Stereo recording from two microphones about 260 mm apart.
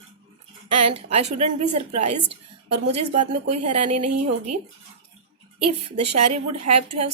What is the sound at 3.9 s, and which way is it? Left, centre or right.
Speech, right.